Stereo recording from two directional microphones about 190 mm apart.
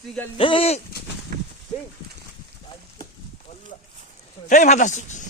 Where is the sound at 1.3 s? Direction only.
50° right (ahead or behind).